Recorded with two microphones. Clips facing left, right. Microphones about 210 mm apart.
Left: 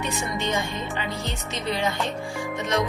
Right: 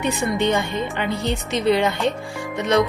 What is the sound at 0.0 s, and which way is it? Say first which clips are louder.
Speech: right 7 dB; 60° right (ahead or behind).